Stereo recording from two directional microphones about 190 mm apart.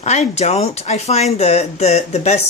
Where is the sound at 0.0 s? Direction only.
35° left (ahead or behind).